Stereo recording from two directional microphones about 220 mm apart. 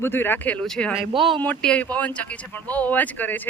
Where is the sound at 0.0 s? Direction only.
10° left (ahead or behind).